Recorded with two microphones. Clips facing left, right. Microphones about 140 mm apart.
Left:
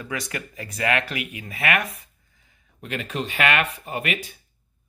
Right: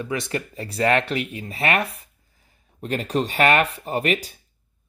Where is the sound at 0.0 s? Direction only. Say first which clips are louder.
Right 5 dB; 25° right (ahead or behind).